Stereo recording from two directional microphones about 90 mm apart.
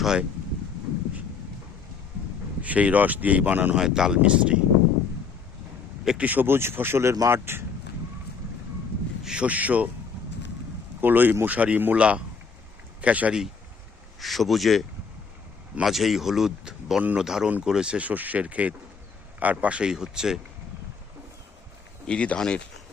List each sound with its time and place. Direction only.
0.0 s speech: 5° right (ahead or behind)
2.6 s speech: 15° right (ahead or behind)
3.8 s speech: 5° right (ahead or behind)
6.1 s speech: 15° right (ahead or behind)
9.2 s speech: 10° right (ahead or behind)
11.0 s speech: 20° right (ahead or behind)
14.2 s speech: centre (ahead or behind)
22.0 s speech: 10° left (ahead or behind)